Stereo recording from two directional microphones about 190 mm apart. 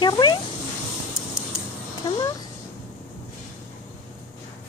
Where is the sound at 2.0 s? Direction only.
20° left (ahead or behind).